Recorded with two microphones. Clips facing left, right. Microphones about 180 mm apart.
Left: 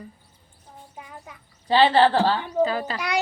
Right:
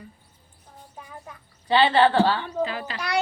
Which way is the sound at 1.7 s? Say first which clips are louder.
Left 1 dB; 35° left (ahead or behind).